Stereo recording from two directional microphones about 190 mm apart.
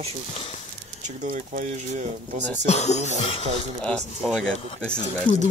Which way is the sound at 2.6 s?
35° left (ahead or behind).